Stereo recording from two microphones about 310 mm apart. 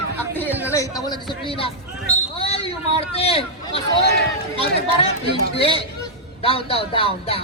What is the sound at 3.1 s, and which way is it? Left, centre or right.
Speech, centre.